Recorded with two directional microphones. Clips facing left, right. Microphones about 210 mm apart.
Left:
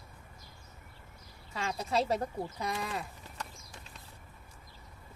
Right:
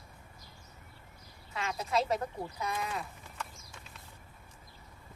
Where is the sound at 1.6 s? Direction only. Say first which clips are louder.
Even; 30° left (ahead or behind).